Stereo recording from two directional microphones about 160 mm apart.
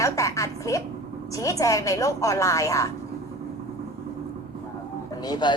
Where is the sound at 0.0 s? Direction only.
20° left (ahead or behind).